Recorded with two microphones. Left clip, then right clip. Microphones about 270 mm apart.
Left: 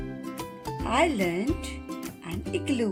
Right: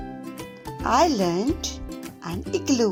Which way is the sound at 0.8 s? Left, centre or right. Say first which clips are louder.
Right 5 dB; right.